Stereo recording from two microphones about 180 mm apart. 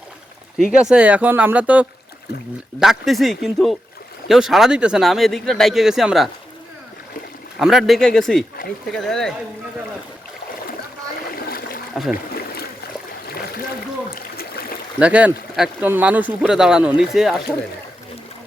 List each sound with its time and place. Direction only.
0.6 s speech: 5° right (ahead or behind)
7.6 s speech: centre (ahead or behind)
11.3 s splash: 55° left (ahead or behind)
12.1 s a sound: 60° left (ahead or behind)
14.2 s splash: 55° left (ahead or behind)
14.9 s speech: 5° right (ahead or behind)